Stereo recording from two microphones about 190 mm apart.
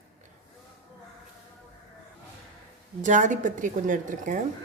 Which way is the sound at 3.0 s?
40° right (ahead or behind).